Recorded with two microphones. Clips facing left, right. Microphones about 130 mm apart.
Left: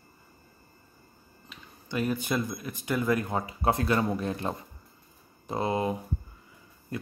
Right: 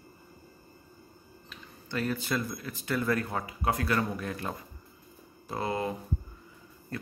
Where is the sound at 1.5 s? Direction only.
15° left (ahead or behind).